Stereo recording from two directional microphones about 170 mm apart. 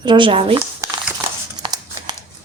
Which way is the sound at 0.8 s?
20° right (ahead or behind).